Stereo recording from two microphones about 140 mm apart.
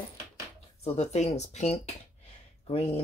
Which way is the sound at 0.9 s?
50° left (ahead or behind).